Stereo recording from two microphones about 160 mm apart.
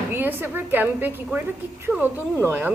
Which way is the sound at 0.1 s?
15° right (ahead or behind).